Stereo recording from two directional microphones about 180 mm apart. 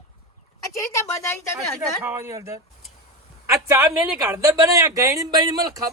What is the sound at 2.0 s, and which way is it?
Speech, 15° right (ahead or behind).